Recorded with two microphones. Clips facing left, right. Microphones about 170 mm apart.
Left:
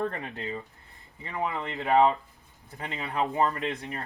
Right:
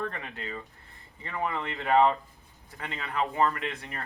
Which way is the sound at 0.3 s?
20° left (ahead or behind).